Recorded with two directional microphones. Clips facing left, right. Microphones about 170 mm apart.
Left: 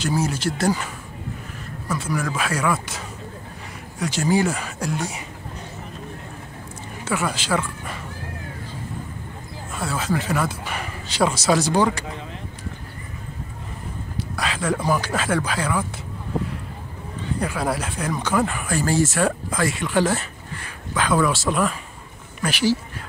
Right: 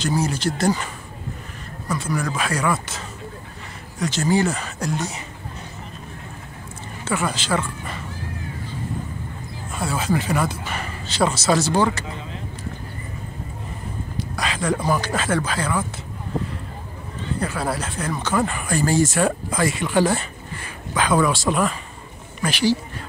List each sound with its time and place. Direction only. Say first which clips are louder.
0.0 s speech: right 1 dB; 5° left (ahead or behind)
1.9 s speech: right 1 dB; 5° left (ahead or behind)
4.0 s speech: even; 10° left (ahead or behind)
7.1 s speech: even; 5° left (ahead or behind)
9.8 s speech: right 2 dB; centre (ahead or behind)
10.5 s speech: right 1 dB; 10° left (ahead or behind)
14.1 s a sound: even; 5° left (ahead or behind)
14.9 s speech: even; 5° left (ahead or behind)
17.4 s speech: left 1 dB; 10° left (ahead or behind)